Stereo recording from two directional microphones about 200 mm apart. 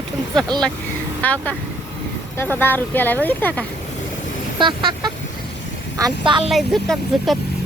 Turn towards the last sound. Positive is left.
turn(degrees=0)  # may be behind; listen again after turning